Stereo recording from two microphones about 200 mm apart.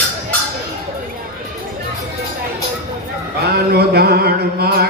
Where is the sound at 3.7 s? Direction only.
50° right (ahead or behind).